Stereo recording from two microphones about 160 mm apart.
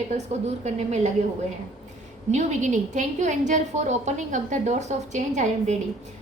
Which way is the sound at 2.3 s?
50° right (ahead or behind).